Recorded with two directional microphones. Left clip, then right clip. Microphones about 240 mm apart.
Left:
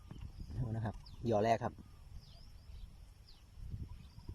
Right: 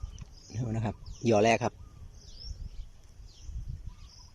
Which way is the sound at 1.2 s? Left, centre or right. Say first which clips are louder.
Right 8 dB; centre.